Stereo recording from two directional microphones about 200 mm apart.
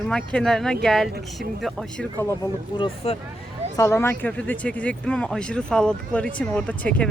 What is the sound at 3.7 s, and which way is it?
Speech, 15° left (ahead or behind).